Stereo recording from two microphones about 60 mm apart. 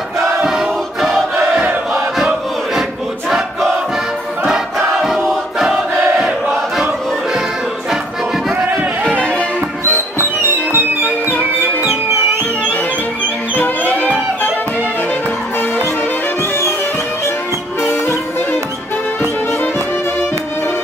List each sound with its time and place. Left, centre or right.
0.5 s choir: centre
2.1 s crowd: centre
3.3 s battle cry: centre
4.7 s choir: centre
9.2 s music: left
9.9 s music: right
13.2 s music: left